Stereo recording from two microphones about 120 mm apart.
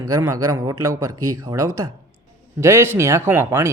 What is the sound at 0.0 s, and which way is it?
Speech, 25° right (ahead or behind).